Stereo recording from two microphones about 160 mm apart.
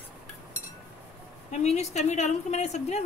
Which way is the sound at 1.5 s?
45° left (ahead or behind).